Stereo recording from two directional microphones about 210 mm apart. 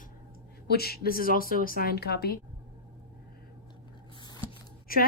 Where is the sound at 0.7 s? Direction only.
50° left (ahead or behind).